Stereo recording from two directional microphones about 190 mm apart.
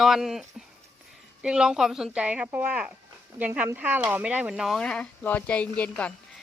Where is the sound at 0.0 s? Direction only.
Centre (ahead or behind).